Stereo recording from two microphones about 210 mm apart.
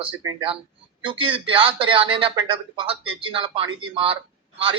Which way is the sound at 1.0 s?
25° right (ahead or behind).